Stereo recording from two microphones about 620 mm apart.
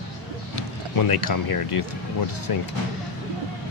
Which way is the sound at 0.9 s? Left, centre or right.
Left.